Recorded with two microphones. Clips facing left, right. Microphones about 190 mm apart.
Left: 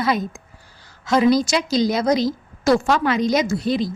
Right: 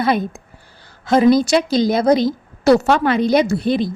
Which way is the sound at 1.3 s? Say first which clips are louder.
Right 4 dB; 55° right (ahead or behind).